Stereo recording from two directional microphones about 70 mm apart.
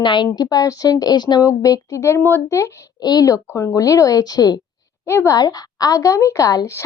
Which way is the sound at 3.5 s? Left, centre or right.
Left.